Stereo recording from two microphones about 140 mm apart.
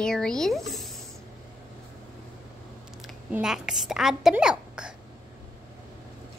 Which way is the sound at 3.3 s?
5° right (ahead or behind).